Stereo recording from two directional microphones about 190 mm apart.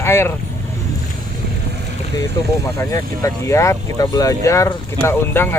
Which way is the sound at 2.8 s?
15° left (ahead or behind).